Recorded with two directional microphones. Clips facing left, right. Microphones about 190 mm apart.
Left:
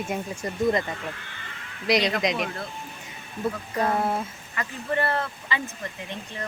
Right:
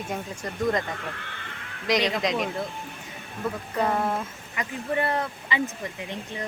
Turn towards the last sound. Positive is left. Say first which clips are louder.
# even
turn(degrees=-15)  # may be behind; listen again after turning